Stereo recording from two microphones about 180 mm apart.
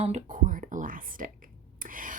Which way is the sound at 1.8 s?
50° right (ahead or behind).